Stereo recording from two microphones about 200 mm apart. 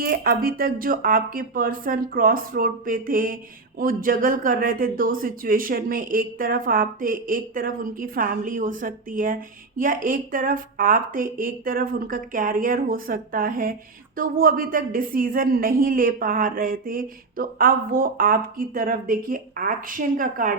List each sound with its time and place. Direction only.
0.0 s a man's voice: 45° right (ahead or behind)